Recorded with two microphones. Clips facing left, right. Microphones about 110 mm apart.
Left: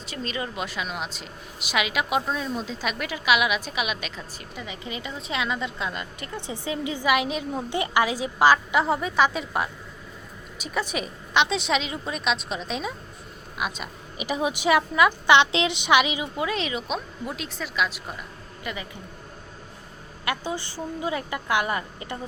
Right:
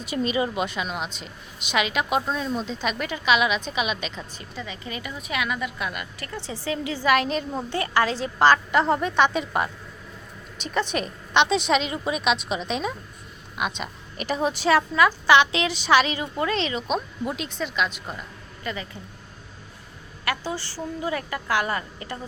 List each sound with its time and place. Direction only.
0.0 s speech: 15° right (ahead or behind)
0.6 s a woman's voice: centre (ahead or behind)
4.5 s a woman's voice: 15° left (ahead or behind)
18.6 s speech: 15° left (ahead or behind)
20.2 s a woman's voice: 20° left (ahead or behind)